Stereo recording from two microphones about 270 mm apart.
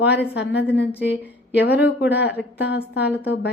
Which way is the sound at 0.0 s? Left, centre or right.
Left.